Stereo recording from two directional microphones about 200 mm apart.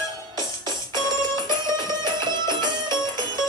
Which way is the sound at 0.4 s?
20° right (ahead or behind).